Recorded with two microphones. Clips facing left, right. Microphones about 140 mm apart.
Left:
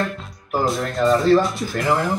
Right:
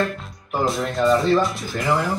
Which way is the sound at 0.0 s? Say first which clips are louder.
Right 1 dB; centre (ahead or behind).